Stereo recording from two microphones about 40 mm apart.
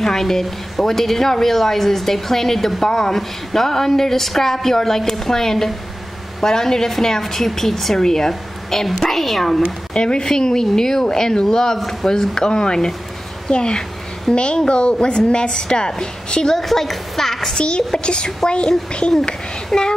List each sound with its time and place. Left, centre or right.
0.0 s a woman's voice: centre
9.9 s a woman's voice: left
16.5 s a woman's voice: centre
17.6 s a woman's voice: left